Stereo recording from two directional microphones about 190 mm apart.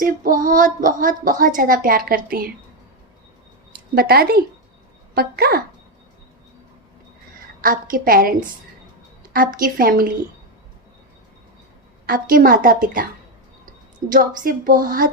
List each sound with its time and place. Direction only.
0.0 s a woman's voice: 45° right (ahead or behind)
3.9 s a woman's voice: 55° right (ahead or behind)
7.6 s a woman's voice: 45° right (ahead or behind)
12.0 s a woman's voice: 50° right (ahead or behind)
14.1 s a woman's voice: 45° right (ahead or behind)